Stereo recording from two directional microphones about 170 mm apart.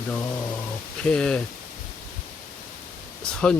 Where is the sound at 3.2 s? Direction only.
5° left (ahead or behind).